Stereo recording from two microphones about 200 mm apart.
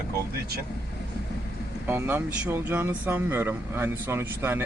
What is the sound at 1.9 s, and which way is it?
Speech, 10° right (ahead or behind).